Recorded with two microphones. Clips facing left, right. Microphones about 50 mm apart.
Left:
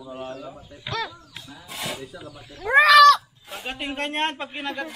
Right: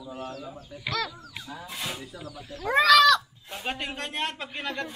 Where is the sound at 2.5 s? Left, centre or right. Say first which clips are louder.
Left 4 dB; centre.